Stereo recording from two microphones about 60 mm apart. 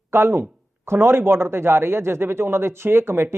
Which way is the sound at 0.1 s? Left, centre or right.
Right.